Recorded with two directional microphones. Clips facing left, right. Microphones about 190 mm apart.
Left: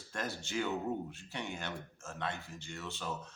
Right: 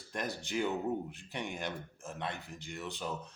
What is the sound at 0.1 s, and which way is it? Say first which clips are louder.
A man's voice: right 2 dB; 15° right (ahead or behind).